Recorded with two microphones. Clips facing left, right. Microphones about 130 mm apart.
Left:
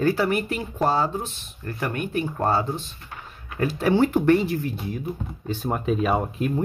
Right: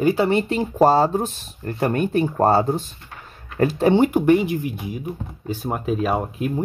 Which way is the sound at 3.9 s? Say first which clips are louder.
Right 1 dB; 15° right (ahead or behind).